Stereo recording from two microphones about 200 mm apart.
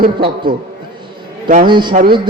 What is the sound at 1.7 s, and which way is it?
Speech, 20° right (ahead or behind).